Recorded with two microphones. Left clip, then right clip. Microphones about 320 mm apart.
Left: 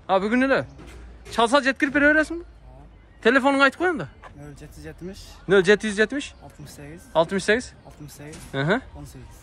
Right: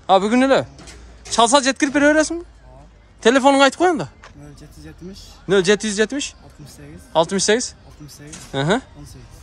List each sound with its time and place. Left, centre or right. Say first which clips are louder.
0.0 s a man's voice: right 6 dB; centre
4.8 s speech: left 1 dB; centre